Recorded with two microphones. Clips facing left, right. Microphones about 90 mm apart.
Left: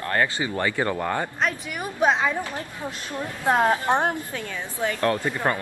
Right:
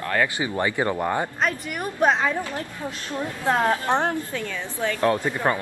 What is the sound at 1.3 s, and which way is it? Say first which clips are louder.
Speech: right 1 dB; centre (ahead or behind).